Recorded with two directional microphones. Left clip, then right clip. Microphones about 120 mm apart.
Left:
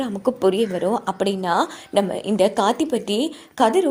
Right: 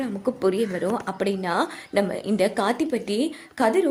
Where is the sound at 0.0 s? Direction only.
35° left (ahead or behind); by 1.7 s 15° left (ahead or behind).